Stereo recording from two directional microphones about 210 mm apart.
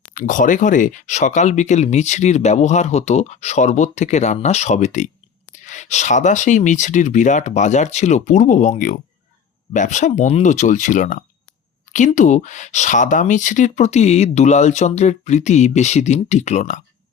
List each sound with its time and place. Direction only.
0.1 s speech: 40° left (ahead or behind)